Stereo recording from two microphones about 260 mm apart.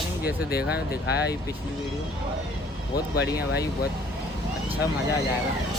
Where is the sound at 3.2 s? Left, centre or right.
Left.